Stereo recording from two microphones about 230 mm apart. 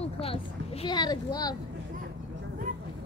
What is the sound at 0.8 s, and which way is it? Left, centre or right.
Speech, centre.